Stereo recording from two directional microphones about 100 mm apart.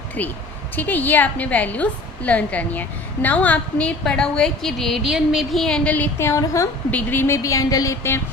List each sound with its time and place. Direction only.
0.2 s a woman's voice: 15° left (ahead or behind)
6.1 s a woman's voice: 30° left (ahead or behind)
6.9 s a woman's voice: 20° left (ahead or behind)